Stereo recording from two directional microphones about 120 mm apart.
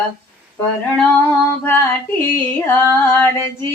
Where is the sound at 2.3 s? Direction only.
20° left (ahead or behind).